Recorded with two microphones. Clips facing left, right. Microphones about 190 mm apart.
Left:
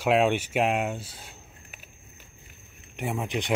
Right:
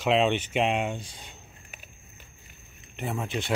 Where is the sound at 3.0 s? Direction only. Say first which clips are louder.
Left 2 dB; 15° left (ahead or behind).